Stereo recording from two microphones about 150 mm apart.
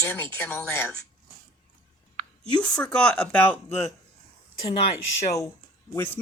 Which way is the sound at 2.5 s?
10° left (ahead or behind).